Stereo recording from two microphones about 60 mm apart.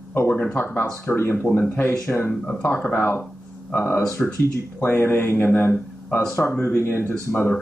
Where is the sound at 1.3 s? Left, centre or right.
Left.